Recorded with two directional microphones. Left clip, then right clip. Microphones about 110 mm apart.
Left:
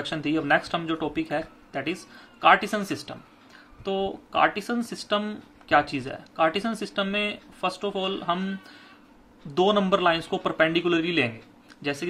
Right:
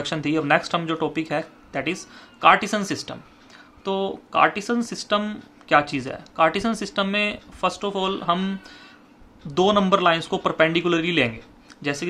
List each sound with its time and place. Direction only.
0.0 s speech: 30° right (ahead or behind)